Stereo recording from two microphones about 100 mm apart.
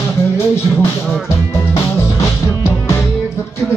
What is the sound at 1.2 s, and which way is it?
Music, 25° left (ahead or behind).